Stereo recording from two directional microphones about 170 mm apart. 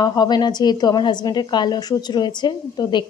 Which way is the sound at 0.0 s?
25° left (ahead or behind).